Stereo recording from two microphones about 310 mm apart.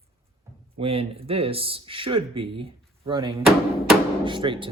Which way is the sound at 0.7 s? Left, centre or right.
Centre.